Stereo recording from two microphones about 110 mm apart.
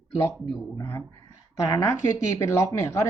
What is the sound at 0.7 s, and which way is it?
Speech, 20° left (ahead or behind).